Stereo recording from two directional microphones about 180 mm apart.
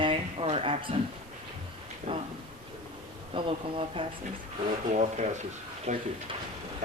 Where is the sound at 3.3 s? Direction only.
30° right (ahead or behind).